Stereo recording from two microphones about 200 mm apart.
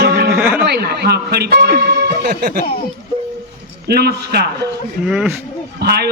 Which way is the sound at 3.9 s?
55° right (ahead or behind).